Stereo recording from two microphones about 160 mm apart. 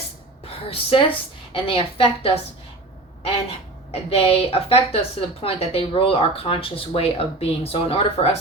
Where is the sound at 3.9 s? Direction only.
40° left (ahead or behind).